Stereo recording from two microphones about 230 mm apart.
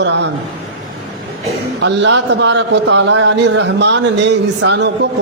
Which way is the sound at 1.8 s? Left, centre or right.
Right.